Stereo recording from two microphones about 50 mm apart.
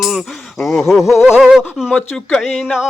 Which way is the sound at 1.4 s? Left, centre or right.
Centre.